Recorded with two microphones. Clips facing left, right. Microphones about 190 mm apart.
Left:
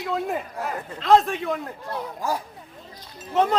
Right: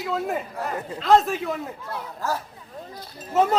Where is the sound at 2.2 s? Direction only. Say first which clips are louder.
Even; 15° left (ahead or behind).